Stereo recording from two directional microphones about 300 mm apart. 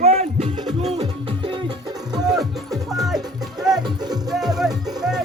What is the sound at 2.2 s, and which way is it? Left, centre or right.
Music, centre.